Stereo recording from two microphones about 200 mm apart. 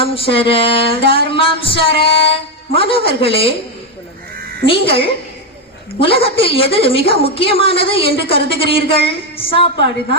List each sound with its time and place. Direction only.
0.0 s a woman's voice: 25° left (ahead or behind)
4.6 s a woman's voice: 25° left (ahead or behind)